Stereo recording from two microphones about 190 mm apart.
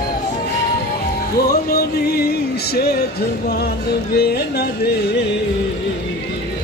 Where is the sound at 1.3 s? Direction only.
55° left (ahead or behind).